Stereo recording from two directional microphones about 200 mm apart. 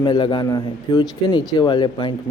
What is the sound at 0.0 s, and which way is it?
A man's voice, 25° left (ahead or behind).